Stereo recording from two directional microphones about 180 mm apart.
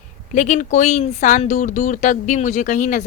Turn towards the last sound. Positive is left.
turn(degrees=45)  # may be behind; listen again after turning